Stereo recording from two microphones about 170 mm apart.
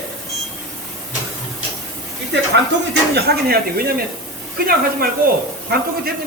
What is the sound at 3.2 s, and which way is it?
Speech, 65° right (ahead or behind).